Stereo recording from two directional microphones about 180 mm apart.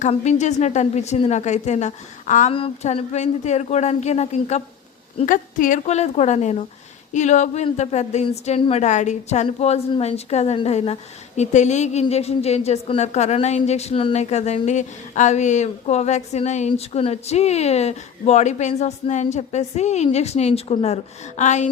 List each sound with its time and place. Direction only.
0.0 s a woman's voice: 40° left (ahead or behind)
2.5 s a woman's voice: 30° left (ahead or behind)